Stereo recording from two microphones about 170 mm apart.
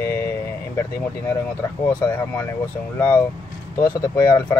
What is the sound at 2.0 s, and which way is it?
Speech, 15° left (ahead or behind).